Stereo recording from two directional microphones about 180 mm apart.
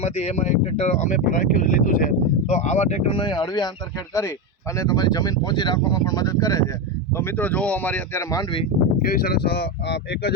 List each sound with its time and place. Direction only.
0.0 s speech: 35° left (ahead or behind)
4.8 s speech: 20° left (ahead or behind)
9.0 s speech: 55° left (ahead or behind)